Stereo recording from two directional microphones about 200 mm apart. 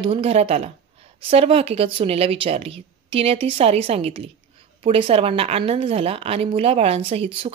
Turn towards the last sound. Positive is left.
turn(degrees=-30)  # may be behind; listen again after turning